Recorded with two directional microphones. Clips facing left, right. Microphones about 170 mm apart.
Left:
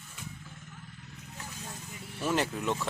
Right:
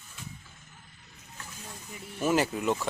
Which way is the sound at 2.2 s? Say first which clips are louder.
Right 4 dB; 5° right (ahead or behind).